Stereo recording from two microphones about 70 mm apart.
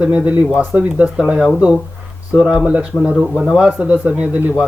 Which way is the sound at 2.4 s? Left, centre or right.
Centre.